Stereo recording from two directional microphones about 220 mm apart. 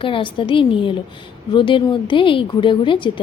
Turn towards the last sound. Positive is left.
turn(degrees=20)  # may be behind; listen again after turning